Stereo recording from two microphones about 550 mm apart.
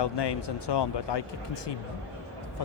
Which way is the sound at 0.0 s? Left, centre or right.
Left.